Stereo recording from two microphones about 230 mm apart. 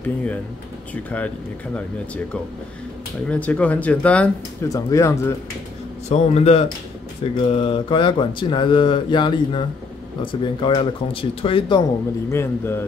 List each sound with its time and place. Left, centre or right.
0.0 s a man's voice: centre
3.3 s speech: centre
6.0 s speech: left
12.3 s a man's voice: centre